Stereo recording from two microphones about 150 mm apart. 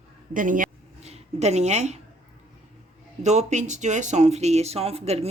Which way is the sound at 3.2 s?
50° right (ahead or behind).